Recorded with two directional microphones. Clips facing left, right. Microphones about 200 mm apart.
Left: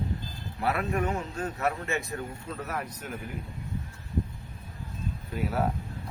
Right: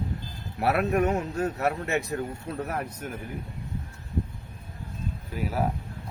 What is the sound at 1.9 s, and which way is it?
Speech, 65° right (ahead or behind).